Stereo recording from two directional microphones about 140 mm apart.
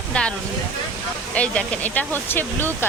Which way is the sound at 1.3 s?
10° left (ahead or behind).